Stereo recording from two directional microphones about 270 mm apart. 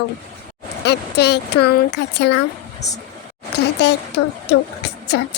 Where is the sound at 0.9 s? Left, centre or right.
Left.